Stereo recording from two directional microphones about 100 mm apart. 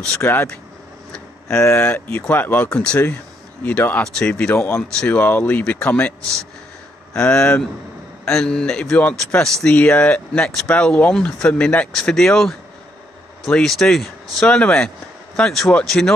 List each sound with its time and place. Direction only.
0.0 s speech: 20° left (ahead or behind)
1.6 s speech: 25° left (ahead or behind)
4.5 s speech: 20° left (ahead or behind)
7.2 s speech: 10° left (ahead or behind)